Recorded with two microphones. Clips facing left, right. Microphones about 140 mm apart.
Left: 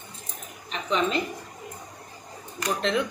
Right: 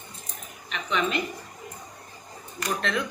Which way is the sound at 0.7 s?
30° left (ahead or behind).